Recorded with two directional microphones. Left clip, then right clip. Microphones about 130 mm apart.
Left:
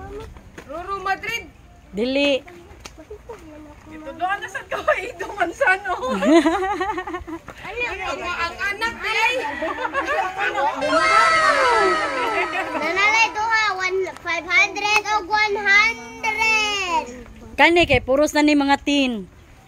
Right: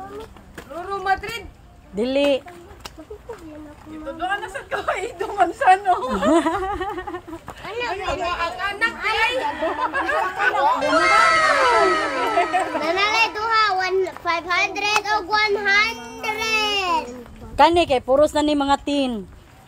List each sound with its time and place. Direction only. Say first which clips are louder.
0.8 s a woman's voice: right 2 dB; 20° left (ahead or behind)
4.2 s a woman's voice: left 2 dB; 20° left (ahead or behind)
6.3 s speech: left 3 dB; 50° left (ahead or behind)
7.6 s speech: left 1 dB; 30° right (ahead or behind)
8.4 s a woman's voice: right 1 dB; 25° left (ahead or behind)
10.4 s speech: right 7 dB; 40° right (ahead or behind)
10.8 s crowd: left 3 dB; centre (ahead or behind)
12.8 s children playing: left 4 dB; 25° right (ahead or behind)
15.0 s a sound: even; 30° right (ahead or behind)
17.6 s a woman's voice: even; 30° left (ahead or behind)